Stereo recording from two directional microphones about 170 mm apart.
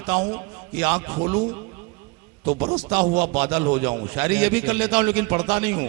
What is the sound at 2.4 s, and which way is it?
Speech, 25° right (ahead or behind).